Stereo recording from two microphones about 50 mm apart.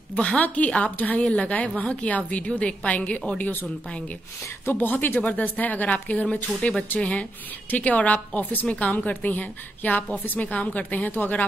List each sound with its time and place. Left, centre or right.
0.1 s a woman's voice: left
4.7 s a woman's voice: left